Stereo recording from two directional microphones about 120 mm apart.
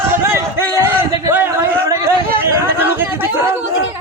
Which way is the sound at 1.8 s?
25° right (ahead or behind).